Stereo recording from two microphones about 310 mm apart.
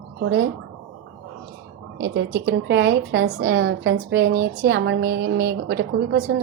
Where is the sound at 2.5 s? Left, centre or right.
Right.